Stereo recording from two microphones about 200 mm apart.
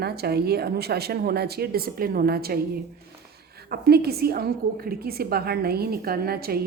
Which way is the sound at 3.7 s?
50° right (ahead or behind).